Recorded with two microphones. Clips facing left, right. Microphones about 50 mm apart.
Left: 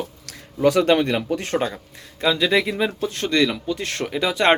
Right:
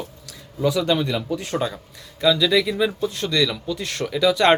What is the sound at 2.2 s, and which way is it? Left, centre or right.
Speech, left.